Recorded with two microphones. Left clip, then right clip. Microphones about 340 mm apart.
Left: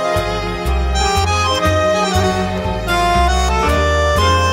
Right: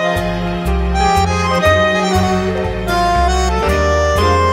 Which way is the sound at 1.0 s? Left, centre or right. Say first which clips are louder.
Right 2 dB; centre.